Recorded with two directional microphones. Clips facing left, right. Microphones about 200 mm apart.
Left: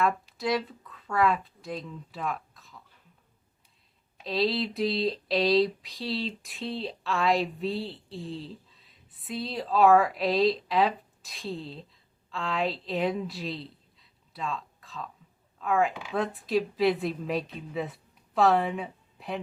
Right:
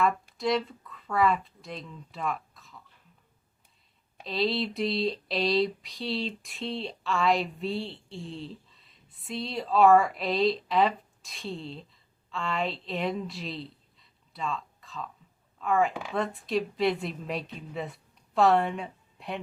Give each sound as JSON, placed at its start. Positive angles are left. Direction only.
{"t": 0.3, "sound": "speech", "side_deg": 0}
{"t": 4.2, "sound": "a woman's voice", "side_deg": 0}